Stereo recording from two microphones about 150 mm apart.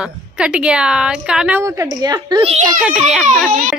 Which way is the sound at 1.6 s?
25° right (ahead or behind).